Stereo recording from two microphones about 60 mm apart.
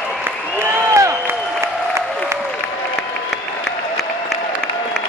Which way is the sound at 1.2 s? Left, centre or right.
Right.